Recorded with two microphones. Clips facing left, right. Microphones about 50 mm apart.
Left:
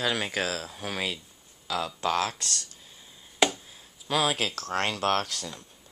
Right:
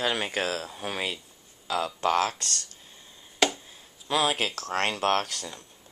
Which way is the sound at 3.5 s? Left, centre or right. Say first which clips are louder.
Even; centre.